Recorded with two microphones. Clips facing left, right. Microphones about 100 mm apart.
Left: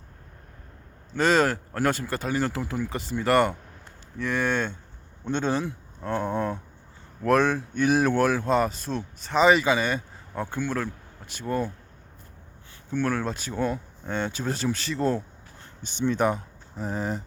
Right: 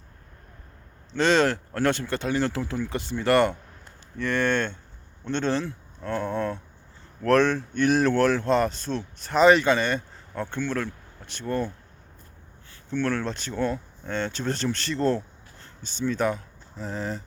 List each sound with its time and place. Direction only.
1.1 s speech: 5° left (ahead or behind)
12.9 s speech: 10° left (ahead or behind)